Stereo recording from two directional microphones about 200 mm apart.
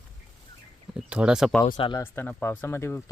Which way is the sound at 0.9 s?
5° right (ahead or behind).